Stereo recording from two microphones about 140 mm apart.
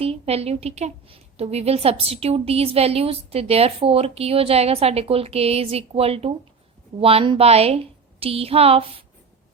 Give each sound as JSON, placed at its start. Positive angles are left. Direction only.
{"t": 0.0, "sound": "a woman's voice", "side_deg": -45}